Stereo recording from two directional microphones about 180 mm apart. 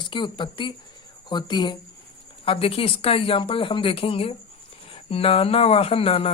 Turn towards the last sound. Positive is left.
turn(degrees=30)  # may be behind; listen again after turning